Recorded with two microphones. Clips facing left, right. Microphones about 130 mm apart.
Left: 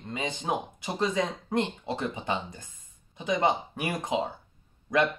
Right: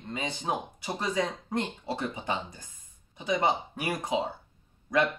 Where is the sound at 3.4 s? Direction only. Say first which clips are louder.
Left 3 dB; 20° left (ahead or behind).